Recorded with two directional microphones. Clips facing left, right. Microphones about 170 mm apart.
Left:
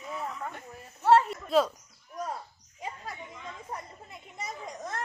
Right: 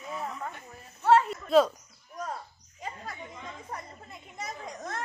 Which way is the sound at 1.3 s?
5° left (ahead or behind).